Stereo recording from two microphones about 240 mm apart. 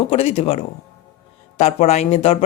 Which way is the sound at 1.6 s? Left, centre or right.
Left.